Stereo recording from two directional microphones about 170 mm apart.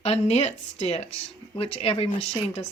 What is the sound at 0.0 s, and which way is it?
Speech, 40° left (ahead or behind).